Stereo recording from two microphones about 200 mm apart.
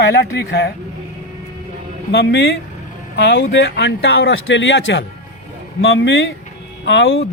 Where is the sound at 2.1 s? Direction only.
55° left (ahead or behind).